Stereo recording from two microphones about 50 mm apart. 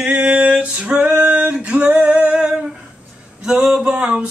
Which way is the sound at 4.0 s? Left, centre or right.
Right.